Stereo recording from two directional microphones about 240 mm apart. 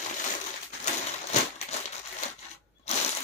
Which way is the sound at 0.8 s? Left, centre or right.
Left.